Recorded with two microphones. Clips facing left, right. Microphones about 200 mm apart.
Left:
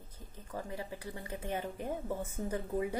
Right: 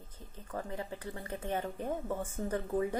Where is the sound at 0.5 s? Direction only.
15° left (ahead or behind).